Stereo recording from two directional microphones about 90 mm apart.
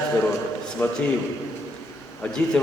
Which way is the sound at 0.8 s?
25° left (ahead or behind).